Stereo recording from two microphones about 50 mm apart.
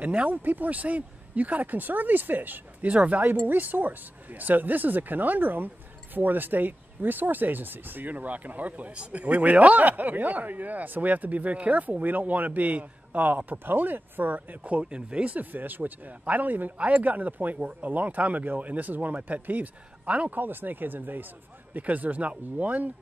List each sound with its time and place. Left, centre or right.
0.0 s speech: right
2.9 s speech: right
20.3 s speech: right